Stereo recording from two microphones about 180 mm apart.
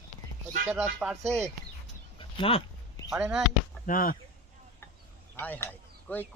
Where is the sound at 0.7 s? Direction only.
5° right (ahead or behind).